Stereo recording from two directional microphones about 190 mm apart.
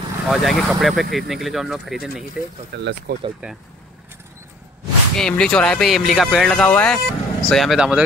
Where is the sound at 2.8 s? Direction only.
65° right (ahead or behind).